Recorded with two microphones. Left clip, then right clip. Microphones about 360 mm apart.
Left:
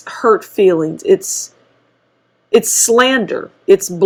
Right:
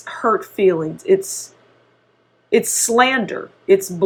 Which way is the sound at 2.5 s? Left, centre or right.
Left.